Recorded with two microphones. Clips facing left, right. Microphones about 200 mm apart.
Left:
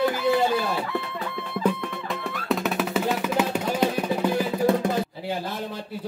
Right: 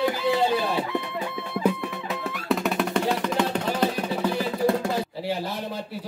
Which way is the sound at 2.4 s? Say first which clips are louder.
Right 1 dB; centre (ahead or behind).